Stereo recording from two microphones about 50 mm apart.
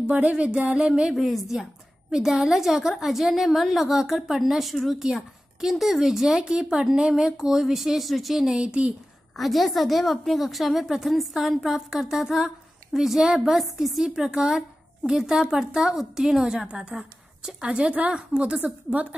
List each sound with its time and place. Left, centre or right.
0.0 s a sound: right
1.1 s a woman's voice: centre
8.5 s a sound: centre
9.4 s a woman's voice: centre
14.0 s a woman's voice: centre
18.6 s a woman's voice: right